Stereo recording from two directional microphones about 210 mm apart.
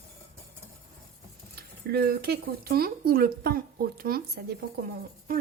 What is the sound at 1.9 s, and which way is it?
A woman's voice, 45° right (ahead or behind).